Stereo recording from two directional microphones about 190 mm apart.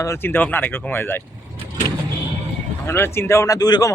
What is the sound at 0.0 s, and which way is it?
Speech, 15° left (ahead or behind).